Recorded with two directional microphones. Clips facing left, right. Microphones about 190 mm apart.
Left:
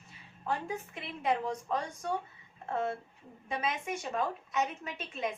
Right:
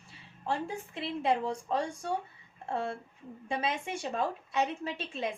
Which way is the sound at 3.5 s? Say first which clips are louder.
Right 1 dB; 30° right (ahead or behind).